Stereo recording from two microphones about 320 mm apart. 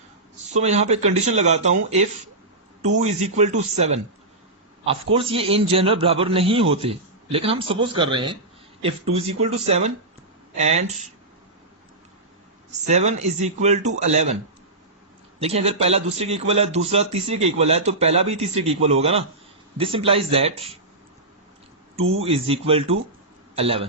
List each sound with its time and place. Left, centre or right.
0.4 s a man's voice: right
3.0 s a man's voice: right
5.1 s a man's voice: centre
12.9 s a man's voice: right
15.4 s a man's voice: centre
22.2 s a man's voice: centre